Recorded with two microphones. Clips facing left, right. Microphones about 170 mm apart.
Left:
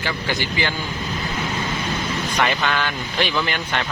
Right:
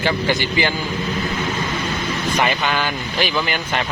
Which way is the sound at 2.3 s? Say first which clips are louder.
Right 1 dB; 5° right (ahead or behind).